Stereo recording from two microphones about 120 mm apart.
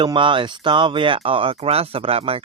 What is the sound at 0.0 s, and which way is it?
Speech, 45° right (ahead or behind).